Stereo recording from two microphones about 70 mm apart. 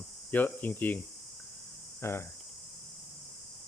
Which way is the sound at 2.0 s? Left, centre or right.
Left.